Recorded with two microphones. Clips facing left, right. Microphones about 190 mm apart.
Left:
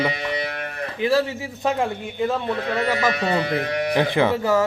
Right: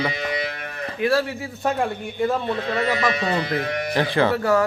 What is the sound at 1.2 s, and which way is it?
Speech, 20° left (ahead or behind).